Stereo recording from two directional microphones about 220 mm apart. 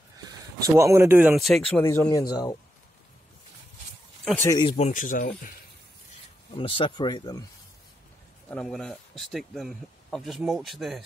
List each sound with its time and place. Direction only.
0.2 s speech: 15° right (ahead or behind); by 1.6 s centre (ahead or behind)
1.8 s speech: 10° left (ahead or behind)
4.2 s a sound: 5° left (ahead or behind)
4.5 s speech: 20° left (ahead or behind); by 5.3 s 40° left (ahead or behind)
6.5 s speech: 25° left (ahead or behind)
8.5 s speech: 5° left (ahead or behind)